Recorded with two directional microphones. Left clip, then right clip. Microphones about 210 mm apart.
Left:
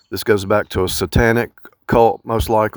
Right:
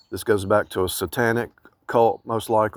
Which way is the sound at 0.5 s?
50° left (ahead or behind).